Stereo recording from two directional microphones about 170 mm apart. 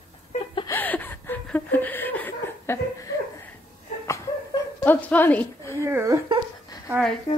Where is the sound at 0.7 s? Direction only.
10° left (ahead or behind).